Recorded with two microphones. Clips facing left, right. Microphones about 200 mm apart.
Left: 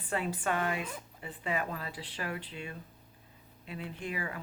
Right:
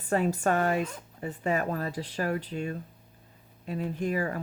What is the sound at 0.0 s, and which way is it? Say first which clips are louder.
Speech: right 8 dB; 45° right (ahead or behind).